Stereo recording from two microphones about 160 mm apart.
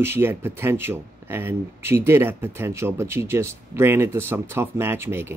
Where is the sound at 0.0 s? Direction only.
15° right (ahead or behind).